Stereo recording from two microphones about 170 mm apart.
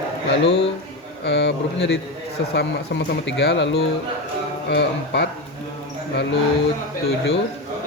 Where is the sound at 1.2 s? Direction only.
90° left.